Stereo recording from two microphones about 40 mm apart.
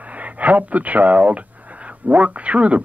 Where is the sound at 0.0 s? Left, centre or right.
Right.